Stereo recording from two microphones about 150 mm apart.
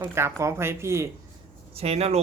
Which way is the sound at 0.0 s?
15° right (ahead or behind).